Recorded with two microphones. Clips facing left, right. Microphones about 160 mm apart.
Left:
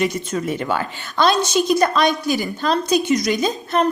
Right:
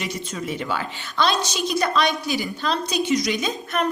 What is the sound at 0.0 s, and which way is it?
A woman's voice, 50° left (ahead or behind).